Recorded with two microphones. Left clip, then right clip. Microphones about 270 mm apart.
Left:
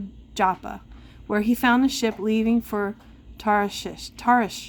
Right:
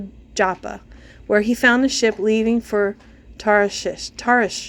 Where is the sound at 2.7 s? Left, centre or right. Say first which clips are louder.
Right 7 dB; left.